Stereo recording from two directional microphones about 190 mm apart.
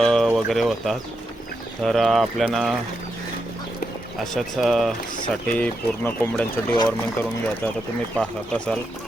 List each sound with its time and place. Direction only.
0.0 s speech: centre (ahead or behind)
4.4 s speech: centre (ahead or behind)
6.7 s speech: 20° left (ahead or behind)
8.1 s speech: 5° left (ahead or behind)